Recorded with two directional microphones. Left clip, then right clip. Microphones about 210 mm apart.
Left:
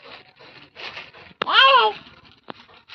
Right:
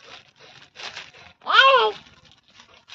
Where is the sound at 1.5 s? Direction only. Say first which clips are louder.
Left 1 dB; 30° right (ahead or behind).